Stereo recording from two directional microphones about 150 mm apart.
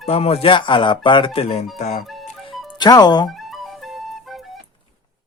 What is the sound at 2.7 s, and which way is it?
Speech, 25° left (ahead or behind).